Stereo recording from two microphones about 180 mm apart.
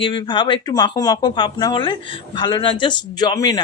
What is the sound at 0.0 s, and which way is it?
Speech, 30° left (ahead or behind).